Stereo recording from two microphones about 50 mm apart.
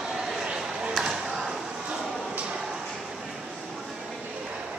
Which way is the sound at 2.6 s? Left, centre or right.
Centre.